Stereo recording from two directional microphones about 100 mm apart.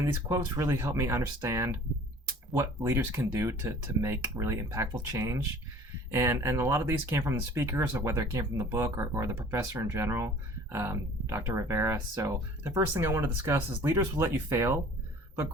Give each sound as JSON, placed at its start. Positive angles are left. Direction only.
{"t": 0.0, "sound": "speech", "side_deg": -25}